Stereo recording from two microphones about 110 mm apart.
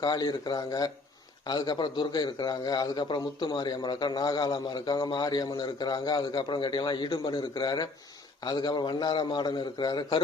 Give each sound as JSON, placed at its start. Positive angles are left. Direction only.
{"t": 0.0, "sound": "a man's voice", "side_deg": 40}